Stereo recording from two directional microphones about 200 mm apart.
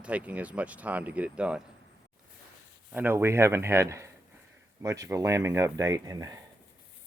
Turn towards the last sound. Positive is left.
turn(degrees=-20)  # may be behind; listen again after turning